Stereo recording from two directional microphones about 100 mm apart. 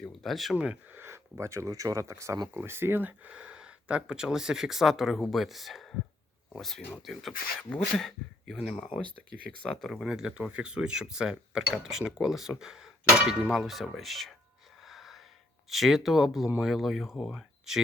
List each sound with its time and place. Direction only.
0.0 s a sound: centre (ahead or behind)
0.5 s speech: 15° right (ahead or behind)
0.9 s speech: 25° right (ahead or behind); by 8.5 s 5° left (ahead or behind)
9.6 s speech: centre (ahead or behind)
14.8 s gasp: centre (ahead or behind)
15.7 s speech: centre (ahead or behind)